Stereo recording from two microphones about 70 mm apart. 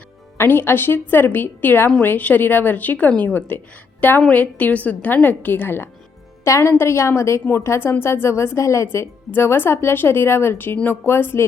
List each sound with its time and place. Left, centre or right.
0.3 s a woman's voice: left
6.4 s a woman's voice: left